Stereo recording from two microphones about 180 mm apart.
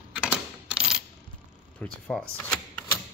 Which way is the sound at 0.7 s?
5° right (ahead or behind).